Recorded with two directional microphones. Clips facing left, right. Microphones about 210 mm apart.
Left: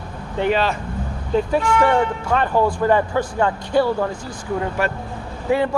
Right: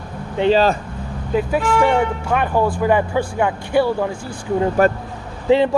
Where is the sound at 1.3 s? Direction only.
5° right (ahead or behind).